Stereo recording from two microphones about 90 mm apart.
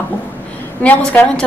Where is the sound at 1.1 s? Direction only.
15° left (ahead or behind).